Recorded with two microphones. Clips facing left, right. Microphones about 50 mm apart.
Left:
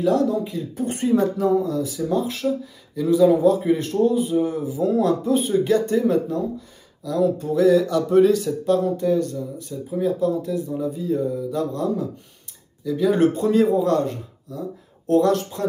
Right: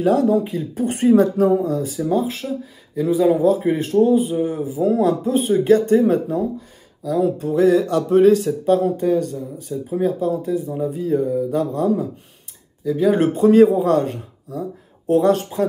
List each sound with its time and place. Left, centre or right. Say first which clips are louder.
0.3 s speech: right 5 dB; right
2.0 s speech: right 3 dB; centre
3.3 s speech: right 1 dB; centre; by 6.2 s right
7.1 s speech: right 2 dB; right
10.8 s speech: right 3 dB; right
13.4 s speech: right 6 dB; right
15.0 s speech: right 2 dB; right